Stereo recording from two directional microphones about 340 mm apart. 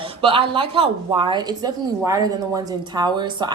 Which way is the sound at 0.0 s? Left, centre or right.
Centre.